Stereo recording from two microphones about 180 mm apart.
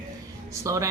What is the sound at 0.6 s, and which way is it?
Speech, 15° right (ahead or behind).